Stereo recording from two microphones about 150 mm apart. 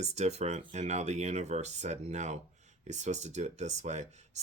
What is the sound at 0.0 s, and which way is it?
Speech, 45° right (ahead or behind).